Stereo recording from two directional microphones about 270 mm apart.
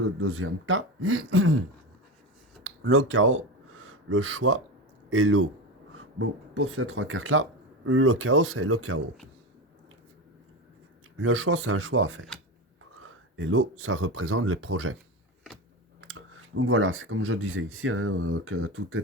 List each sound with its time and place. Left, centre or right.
0.2 s speech: right
2.6 s speech: right
11.2 s speech: right
16.0 s speech: right